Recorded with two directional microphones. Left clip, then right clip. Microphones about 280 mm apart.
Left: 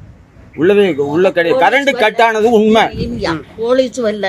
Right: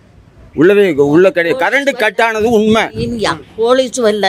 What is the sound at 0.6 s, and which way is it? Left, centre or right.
A woman's voice, right.